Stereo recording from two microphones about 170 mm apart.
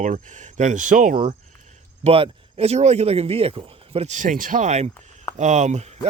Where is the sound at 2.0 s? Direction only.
35° right (ahead or behind).